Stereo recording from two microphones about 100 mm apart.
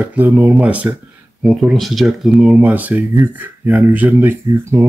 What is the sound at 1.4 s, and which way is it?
Speech, centre (ahead or behind).